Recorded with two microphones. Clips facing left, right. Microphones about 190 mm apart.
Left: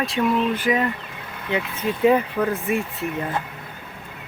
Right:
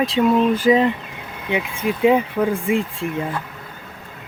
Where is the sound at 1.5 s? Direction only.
10° right (ahead or behind).